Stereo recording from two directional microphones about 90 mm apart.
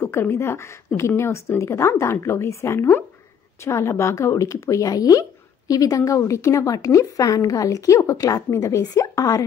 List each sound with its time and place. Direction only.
0.0 s a woman's voice: 25° left (ahead or behind)